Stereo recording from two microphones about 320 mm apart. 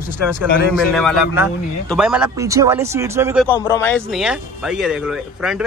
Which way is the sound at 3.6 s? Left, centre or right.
Centre.